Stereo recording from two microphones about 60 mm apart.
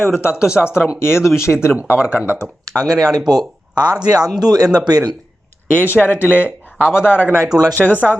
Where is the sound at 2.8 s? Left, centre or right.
Right.